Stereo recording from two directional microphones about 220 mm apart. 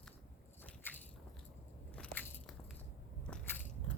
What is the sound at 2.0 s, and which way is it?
Biting, 5° left (ahead or behind).